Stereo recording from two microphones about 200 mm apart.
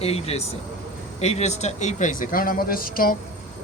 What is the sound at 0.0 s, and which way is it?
Speech, 30° left (ahead or behind).